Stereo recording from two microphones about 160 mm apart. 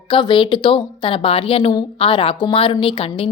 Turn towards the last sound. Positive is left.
turn(degrees=35)  # may be behind; listen again after turning